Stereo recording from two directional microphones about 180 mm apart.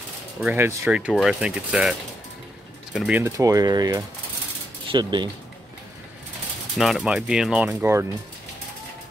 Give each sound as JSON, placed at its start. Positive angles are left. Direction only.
{"t": 0.4, "sound": "speech", "side_deg": -10}
{"t": 3.1, "sound": "speech", "side_deg": -15}
{"t": 6.8, "sound": "speech", "side_deg": 0}